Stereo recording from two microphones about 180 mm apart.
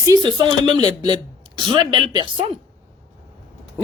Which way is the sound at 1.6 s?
25° right (ahead or behind).